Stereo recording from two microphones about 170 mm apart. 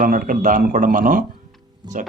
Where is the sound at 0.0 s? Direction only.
55° right (ahead or behind).